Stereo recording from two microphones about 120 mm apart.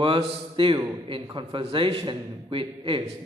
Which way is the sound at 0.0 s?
45° right (ahead or behind).